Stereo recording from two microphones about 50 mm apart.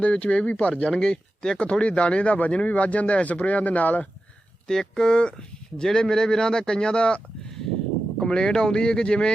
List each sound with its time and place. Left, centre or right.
0.0 s speech: left
0.9 s speech: centre; by 4.1 s left
4.7 s speech: centre
8.2 s speech: centre